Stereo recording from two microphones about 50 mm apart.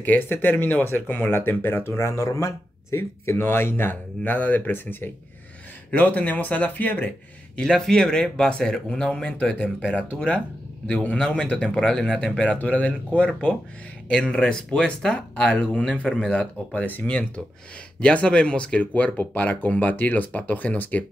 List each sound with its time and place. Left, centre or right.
0.0 s speech: left
2.0 s speech: left
3.0 s speech: left
7.5 s speech: centre
10.9 s speech: left
11.8 s speech: centre
12.4 s speech: left
14.3 s speech: centre; by 21.0 s left